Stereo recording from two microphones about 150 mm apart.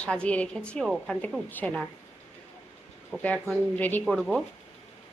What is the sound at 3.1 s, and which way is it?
Speech, 5° left (ahead or behind).